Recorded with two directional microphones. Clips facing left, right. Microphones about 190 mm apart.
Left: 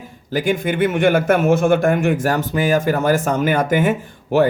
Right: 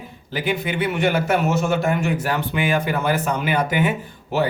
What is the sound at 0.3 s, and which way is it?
Speech, 45° left (ahead or behind).